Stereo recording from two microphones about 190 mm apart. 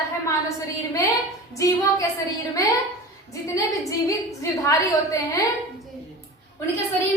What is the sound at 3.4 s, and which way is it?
A woman's voice, 15° left (ahead or behind).